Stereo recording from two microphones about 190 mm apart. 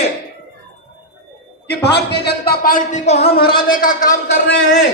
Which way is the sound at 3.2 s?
55° left (ahead or behind).